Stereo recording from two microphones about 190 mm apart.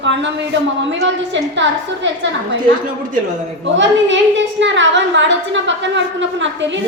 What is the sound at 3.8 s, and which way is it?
A woman's voice, 75° right (ahead or behind).